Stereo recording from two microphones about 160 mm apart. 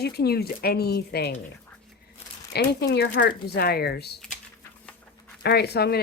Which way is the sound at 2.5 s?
90° left.